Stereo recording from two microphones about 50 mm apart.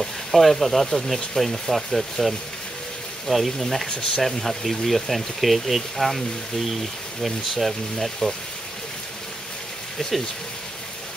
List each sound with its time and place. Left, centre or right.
0.0 s speech: centre
9.9 s speech: centre